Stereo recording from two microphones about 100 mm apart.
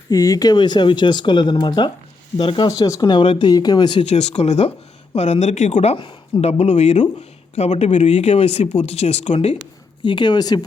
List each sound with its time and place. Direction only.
0.1 s speech: 35° left (ahead or behind)
2.4 s speech: 60° left (ahead or behind)
2.6 s speech: 40° left (ahead or behind)
3.2 s speech: 55° left (ahead or behind)
4.0 s speech: 90° left
6.0 s speech: 55° left (ahead or behind)
6.4 s speech: 90° left
10.0 s speech: 50° left (ahead or behind)